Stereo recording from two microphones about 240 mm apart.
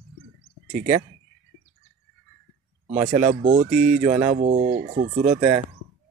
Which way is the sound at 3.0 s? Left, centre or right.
Right.